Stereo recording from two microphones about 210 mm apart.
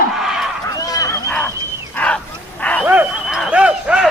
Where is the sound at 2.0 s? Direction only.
5° left (ahead or behind).